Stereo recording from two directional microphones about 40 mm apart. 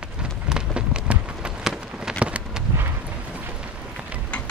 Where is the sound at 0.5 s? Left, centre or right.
Right.